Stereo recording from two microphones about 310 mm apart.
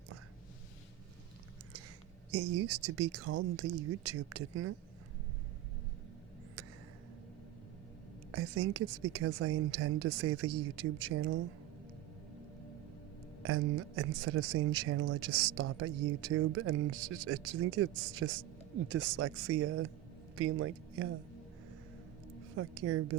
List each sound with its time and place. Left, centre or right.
2.3 s speech: right
6.6 s a sound: right
8.3 s speech: right
13.4 s a man's voice: right
22.5 s speech: right